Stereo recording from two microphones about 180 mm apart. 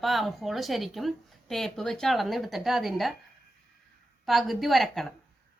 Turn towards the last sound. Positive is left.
turn(degrees=0)  # may be behind; listen again after turning